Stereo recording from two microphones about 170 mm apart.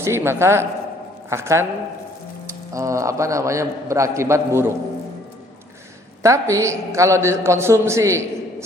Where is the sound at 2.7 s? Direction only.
20° right (ahead or behind).